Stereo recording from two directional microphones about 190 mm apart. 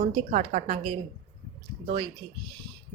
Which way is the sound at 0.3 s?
40° right (ahead or behind).